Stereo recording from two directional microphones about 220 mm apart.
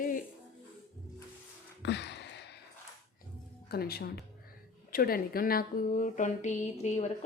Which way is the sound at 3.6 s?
45° left (ahead or behind).